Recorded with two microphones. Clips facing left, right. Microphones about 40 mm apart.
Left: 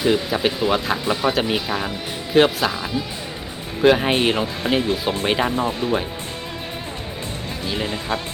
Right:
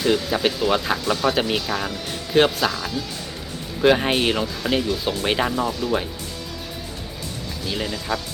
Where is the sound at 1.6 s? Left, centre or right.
Centre.